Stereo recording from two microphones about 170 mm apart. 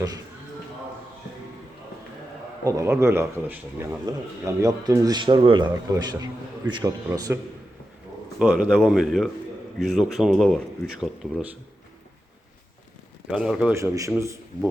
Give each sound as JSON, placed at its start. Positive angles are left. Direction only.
{"t": 2.6, "sound": "speech", "side_deg": -20}
{"t": 8.4, "sound": "speech", "side_deg": -5}
{"t": 13.3, "sound": "speech", "side_deg": -5}
{"t": 13.7, "sound": "a man's voice", "side_deg": -20}